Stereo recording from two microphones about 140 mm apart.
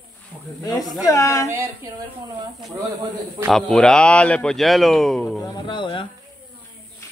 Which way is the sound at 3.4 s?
Centre (ahead or behind).